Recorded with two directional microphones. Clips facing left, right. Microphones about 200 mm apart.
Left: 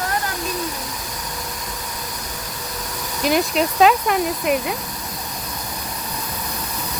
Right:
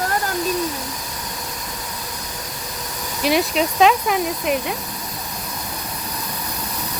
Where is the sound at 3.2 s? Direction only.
Centre (ahead or behind).